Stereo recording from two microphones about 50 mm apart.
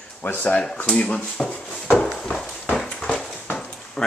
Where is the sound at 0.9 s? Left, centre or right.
Centre.